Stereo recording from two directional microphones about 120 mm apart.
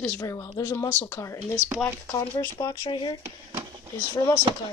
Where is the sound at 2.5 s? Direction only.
25° left (ahead or behind).